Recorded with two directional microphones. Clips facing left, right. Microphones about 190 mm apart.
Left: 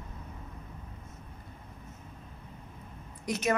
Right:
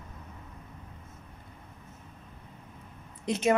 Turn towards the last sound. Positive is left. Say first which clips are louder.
# right 4 dB
turn(degrees=-25)  # may be behind; listen again after turning